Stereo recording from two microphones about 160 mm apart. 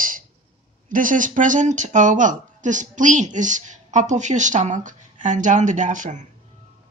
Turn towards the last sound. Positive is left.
turn(degrees=-50)  # may be behind; listen again after turning